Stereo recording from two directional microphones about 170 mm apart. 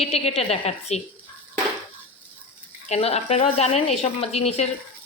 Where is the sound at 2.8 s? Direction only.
40° left (ahead or behind).